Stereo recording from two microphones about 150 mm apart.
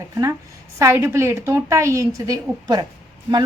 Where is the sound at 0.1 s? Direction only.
20° right (ahead or behind).